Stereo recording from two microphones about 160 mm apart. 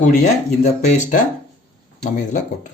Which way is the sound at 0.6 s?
45° left (ahead or behind).